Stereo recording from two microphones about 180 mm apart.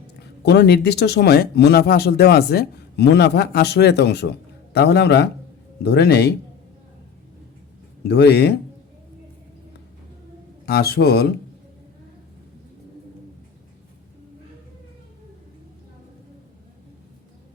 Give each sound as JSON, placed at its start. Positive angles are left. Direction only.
{"t": 0.4, "sound": "speech", "side_deg": 65}
{"t": 8.0, "sound": "speech", "side_deg": 65}
{"t": 10.7, "sound": "speech", "side_deg": 60}